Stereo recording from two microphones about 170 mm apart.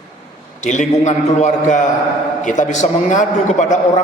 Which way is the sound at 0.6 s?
45° left (ahead or behind).